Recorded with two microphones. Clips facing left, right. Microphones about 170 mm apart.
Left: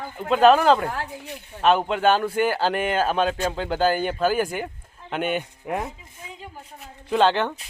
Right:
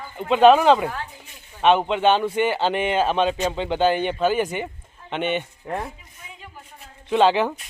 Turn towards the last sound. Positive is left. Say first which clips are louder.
# right 2 dB
turn(degrees=-5)  # may be behind; listen again after turning